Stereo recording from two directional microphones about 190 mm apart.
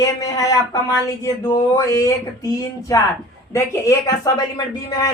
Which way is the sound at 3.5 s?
15° left (ahead or behind).